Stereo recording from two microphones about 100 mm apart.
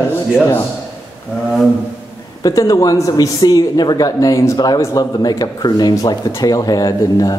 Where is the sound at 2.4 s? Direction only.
35° left (ahead or behind).